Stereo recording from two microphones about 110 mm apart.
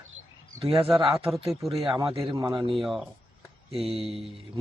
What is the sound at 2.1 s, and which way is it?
Speech, 60° right (ahead or behind).